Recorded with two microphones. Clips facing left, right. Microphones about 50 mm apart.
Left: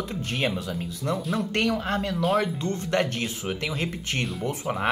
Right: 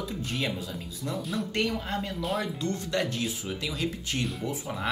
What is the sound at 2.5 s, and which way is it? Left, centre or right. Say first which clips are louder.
Speech: left 4 dB; left.